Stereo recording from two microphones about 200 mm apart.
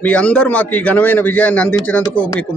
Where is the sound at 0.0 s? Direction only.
5° left (ahead or behind).